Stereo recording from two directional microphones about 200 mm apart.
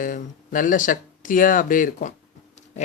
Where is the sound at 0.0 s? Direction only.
40° left (ahead or behind).